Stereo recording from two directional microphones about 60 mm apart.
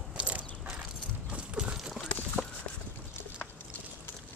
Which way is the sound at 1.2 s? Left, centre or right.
Centre.